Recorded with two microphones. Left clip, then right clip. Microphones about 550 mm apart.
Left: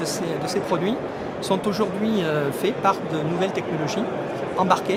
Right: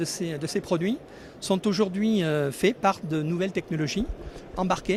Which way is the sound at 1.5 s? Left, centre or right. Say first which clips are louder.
Left 2 dB; right.